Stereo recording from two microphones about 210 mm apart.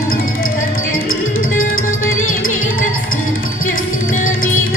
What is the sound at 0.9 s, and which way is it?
Music, 75° left (ahead or behind).